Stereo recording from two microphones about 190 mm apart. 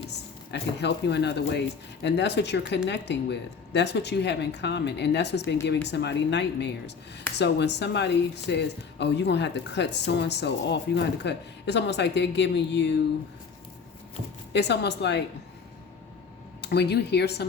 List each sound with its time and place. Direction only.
0.5 s speech: 65° left (ahead or behind)
14.5 s speech: 65° left (ahead or behind)
16.6 s speech: 60° left (ahead or behind)